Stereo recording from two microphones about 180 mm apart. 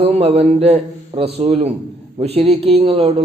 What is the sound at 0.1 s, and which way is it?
A man's voice, 35° right (ahead or behind).